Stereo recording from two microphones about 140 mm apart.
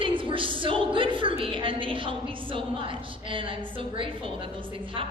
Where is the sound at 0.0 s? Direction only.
35° right (ahead or behind).